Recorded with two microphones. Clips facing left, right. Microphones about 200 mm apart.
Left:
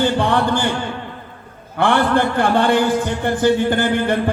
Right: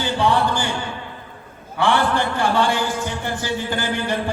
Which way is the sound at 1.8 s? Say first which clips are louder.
Left 3 dB; 55° left (ahead or behind).